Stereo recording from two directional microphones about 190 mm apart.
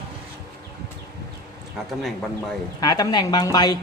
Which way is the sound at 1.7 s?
Centre (ahead or behind).